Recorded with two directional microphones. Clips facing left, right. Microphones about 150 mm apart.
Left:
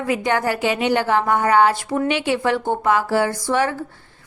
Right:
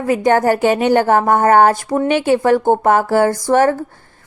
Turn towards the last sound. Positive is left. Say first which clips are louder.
# right 7 dB
turn(degrees=-45)  # may be behind; listen again after turning